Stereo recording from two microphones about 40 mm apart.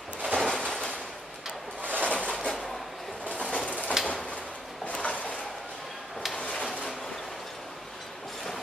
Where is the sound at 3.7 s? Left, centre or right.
Left.